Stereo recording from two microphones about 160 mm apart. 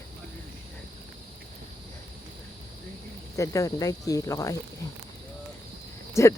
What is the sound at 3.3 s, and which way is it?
Speech, 20° left (ahead or behind).